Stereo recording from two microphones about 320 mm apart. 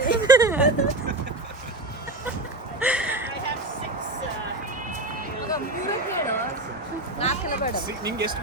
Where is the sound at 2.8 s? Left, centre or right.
Centre.